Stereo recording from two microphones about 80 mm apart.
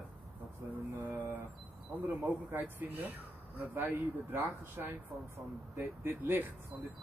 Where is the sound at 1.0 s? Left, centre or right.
Right.